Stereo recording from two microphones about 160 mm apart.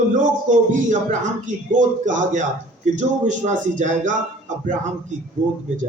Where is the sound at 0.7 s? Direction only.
50° right (ahead or behind).